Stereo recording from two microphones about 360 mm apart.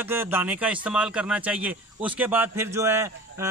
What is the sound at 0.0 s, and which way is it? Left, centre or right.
Speech, centre.